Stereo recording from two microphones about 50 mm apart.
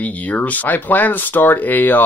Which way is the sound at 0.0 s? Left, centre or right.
Left.